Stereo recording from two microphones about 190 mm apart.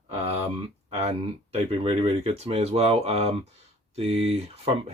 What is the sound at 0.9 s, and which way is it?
Speech, 35° right (ahead or behind).